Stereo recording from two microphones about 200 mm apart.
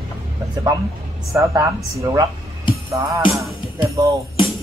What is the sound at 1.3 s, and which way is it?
Music, 15° right (ahead or behind).